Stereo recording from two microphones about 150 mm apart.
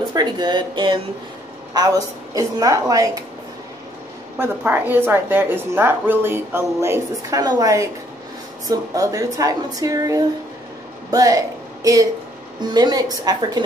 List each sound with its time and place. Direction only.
0.1 s speech: 30° right (ahead or behind)
4.4 s a woman's voice: 10° right (ahead or behind)